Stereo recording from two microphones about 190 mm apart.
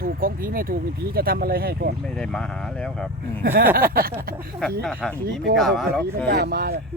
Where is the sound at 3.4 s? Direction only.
50° right (ahead or behind).